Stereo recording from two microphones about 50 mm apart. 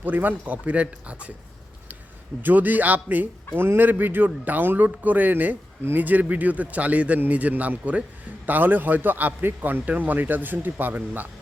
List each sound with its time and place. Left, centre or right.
0.0 s a man's voice: right
2.4 s a man's voice: right